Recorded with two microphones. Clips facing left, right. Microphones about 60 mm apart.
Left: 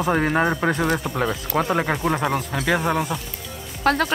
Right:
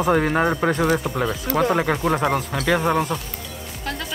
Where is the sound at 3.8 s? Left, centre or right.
Left.